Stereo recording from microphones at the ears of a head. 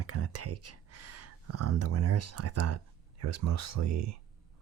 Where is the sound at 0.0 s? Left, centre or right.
Right.